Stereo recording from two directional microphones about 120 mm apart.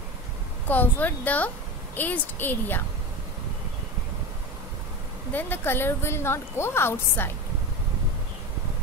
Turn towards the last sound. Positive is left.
turn(degrees=20)  # may be behind; listen again after turning